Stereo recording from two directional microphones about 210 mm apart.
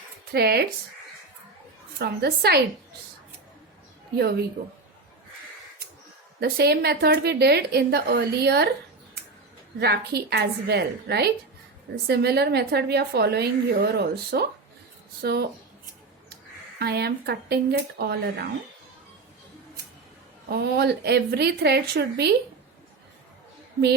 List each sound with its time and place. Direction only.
0.3 s a woman's voice: 50° right (ahead or behind)
2.0 s a woman's voice: 50° right (ahead or behind)
4.2 s a woman's voice: 50° right (ahead or behind)
6.4 s a woman's voice: 50° right (ahead or behind)
9.8 s a woman's voice: 50° right (ahead or behind)
16.7 s a woman's voice: 50° right (ahead or behind)
20.5 s a woman's voice: 50° right (ahead or behind)